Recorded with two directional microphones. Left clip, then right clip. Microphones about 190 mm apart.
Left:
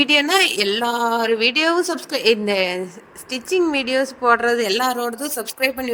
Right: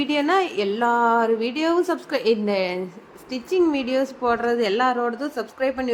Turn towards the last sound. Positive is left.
turn(degrees=0)  # may be behind; listen again after turning